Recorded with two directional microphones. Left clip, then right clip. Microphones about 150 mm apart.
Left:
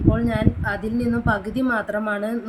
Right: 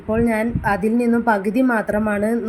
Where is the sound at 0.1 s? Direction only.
25° right (ahead or behind).